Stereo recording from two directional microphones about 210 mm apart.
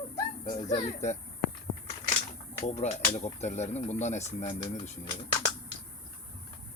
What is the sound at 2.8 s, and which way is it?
Speech, 30° left (ahead or behind).